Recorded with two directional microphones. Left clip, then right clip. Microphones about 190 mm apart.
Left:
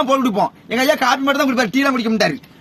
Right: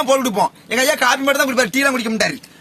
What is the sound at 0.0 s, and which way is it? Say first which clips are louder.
Speech: even; 15° right (ahead or behind).